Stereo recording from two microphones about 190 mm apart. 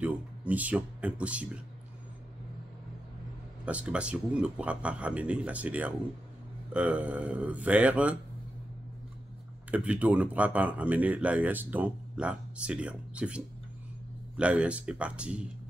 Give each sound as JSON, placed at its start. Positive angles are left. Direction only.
{"t": 0.0, "sound": "speech", "side_deg": -10}
{"t": 3.6, "sound": "speech", "side_deg": -5}
{"t": 9.7, "sound": "speech", "side_deg": -5}